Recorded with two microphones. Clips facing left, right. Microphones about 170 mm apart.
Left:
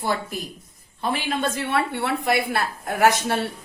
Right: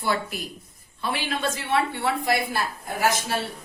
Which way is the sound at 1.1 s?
55° left (ahead or behind).